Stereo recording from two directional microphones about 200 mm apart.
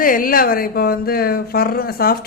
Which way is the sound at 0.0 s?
45° left (ahead or behind).